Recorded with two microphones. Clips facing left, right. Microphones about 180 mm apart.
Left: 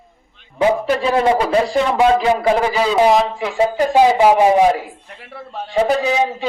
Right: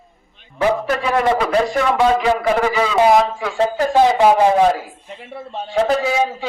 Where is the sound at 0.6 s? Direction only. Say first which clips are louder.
Left 2 dB; 25° left (ahead or behind).